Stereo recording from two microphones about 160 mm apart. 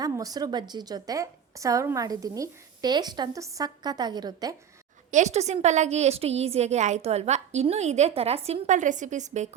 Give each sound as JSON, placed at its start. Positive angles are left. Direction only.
{"t": 0.0, "sound": "a woman's voice", "side_deg": -25}
{"t": 5.1, "sound": "a woman's voice", "side_deg": -45}